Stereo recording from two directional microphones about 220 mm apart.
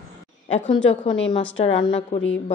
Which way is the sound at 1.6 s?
25° left (ahead or behind).